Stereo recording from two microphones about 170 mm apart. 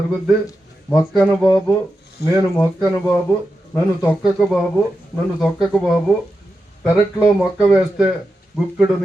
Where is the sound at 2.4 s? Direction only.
20° left (ahead or behind).